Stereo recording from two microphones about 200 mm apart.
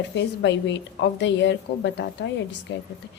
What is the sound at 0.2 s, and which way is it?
A woman's voice, 60° left (ahead or behind).